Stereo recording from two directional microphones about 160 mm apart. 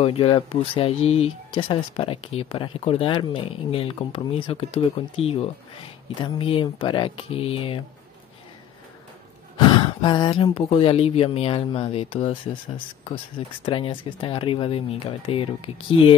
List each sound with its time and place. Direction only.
0.0 s speech: 35° left (ahead or behind)
9.6 s speech: 30° left (ahead or behind)